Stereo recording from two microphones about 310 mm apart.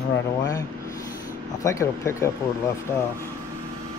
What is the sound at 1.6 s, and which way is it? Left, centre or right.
Speech, centre.